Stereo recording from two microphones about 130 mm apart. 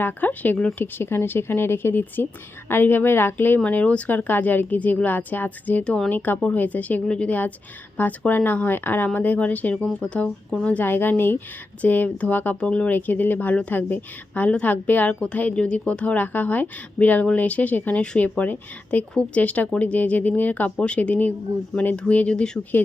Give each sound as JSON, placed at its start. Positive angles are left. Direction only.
{"t": 0.0, "sound": "speech", "side_deg": 15}